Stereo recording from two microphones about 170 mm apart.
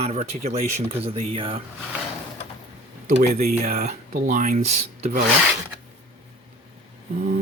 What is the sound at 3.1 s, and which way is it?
Speech, 65° right (ahead or behind).